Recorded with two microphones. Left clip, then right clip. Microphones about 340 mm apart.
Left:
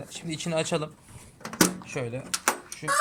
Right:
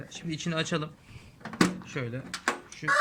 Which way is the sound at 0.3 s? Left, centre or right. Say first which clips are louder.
Left 3 dB; centre.